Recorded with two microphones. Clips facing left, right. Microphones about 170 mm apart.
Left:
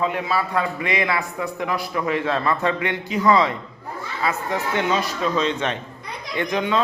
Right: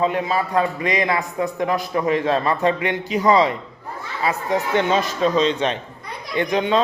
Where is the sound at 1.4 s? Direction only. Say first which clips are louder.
Right 4 dB; 20° right (ahead or behind).